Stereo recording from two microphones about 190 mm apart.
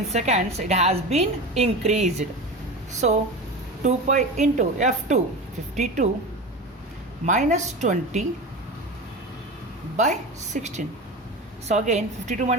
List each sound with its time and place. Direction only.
0.1 s a woman's voice: 35° right (ahead or behind)
3.8 s a woman's voice: 40° right (ahead or behind)
7.3 s a woman's voice: 40° right (ahead or behind)
10.0 s a woman's voice: 40° right (ahead or behind)